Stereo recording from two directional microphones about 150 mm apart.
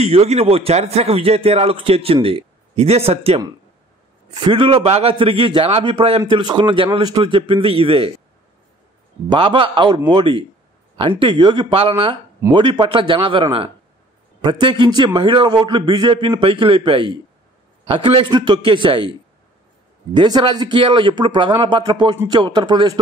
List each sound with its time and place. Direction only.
0.0 s a man's voice: 45° right (ahead or behind)
9.3 s a man's voice: 35° right (ahead or behind)
20.2 s a man's voice: 30° right (ahead or behind)